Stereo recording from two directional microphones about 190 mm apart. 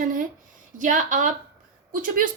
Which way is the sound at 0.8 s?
40° right (ahead or behind).